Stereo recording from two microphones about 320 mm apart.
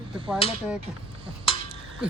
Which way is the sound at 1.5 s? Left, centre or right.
Centre.